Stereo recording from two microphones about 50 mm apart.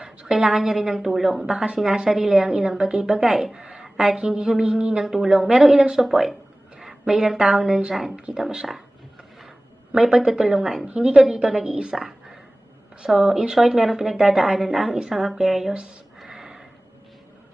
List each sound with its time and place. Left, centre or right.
0.0 s a woman's voice: centre
1.5 s speech: centre
1.8 s a woman's voice: centre
3.6 s a sound: right
3.9 s a woman's voice: centre
6.0 s a woman's voice: centre
9.9 s a woman's voice: centre
10.8 s a woman's voice: centre
13.2 s a woman's voice: centre
16.2 s a sound: centre